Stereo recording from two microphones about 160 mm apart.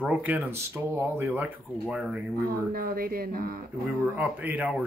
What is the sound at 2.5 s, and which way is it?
A woman's voice, 65° right (ahead or behind).